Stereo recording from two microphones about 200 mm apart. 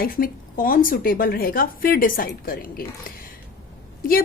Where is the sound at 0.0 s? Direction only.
45° left (ahead or behind).